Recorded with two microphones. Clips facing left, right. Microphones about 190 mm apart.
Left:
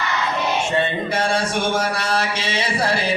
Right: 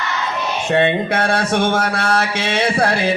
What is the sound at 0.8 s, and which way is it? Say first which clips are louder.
Music: right 5 dB; 65° right (ahead or behind).